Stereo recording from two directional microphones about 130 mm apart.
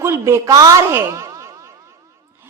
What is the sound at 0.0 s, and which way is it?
A woman's voice, 20° right (ahead or behind).